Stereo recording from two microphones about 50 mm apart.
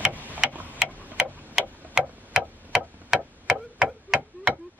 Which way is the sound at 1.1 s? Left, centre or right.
Centre.